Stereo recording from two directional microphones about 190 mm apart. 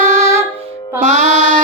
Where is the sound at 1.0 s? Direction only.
35° right (ahead or behind).